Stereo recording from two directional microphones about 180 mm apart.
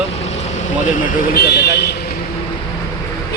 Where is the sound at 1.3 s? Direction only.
60° left (ahead or behind).